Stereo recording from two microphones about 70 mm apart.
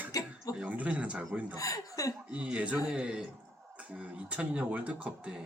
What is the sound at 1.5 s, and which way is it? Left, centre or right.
Speech, left.